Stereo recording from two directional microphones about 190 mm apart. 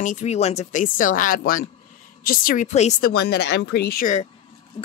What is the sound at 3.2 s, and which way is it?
Speech, 60° left (ahead or behind).